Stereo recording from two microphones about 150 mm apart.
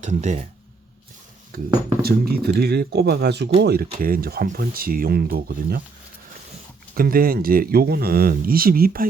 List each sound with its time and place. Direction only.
0.0 s speech: 50° right (ahead or behind)
1.5 s speech: 90° right
3.9 s speech: 75° right (ahead or behind); by 5.8 s 90° right
6.9 s speech: 75° right (ahead or behind)